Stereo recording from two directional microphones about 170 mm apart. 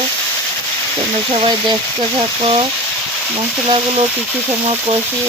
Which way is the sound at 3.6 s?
35° right (ahead or behind).